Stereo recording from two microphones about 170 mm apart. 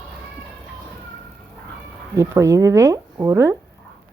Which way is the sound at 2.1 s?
20° right (ahead or behind).